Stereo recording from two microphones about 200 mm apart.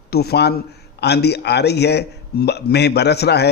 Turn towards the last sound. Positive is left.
turn(degrees=55)  # may be behind; listen again after turning